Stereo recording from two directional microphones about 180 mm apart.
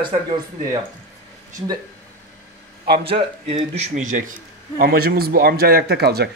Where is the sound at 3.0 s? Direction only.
30° right (ahead or behind); by 6.2 s 65° right (ahead or behind).